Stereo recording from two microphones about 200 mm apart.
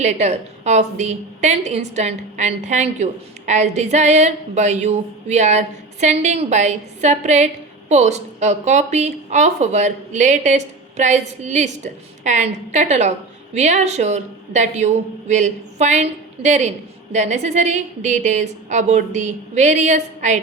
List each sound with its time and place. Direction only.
0.0 s a woman's voice: 35° right (ahead or behind)